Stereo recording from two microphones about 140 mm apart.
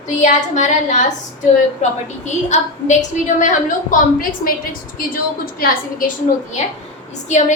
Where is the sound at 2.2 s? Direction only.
55° left (ahead or behind); by 4.5 s 75° left (ahead or behind).